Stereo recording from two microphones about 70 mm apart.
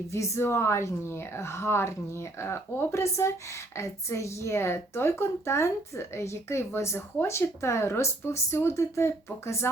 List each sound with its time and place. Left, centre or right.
0.1 s speech: left